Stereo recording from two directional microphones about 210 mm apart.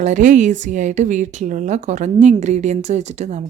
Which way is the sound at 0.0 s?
35° right (ahead or behind).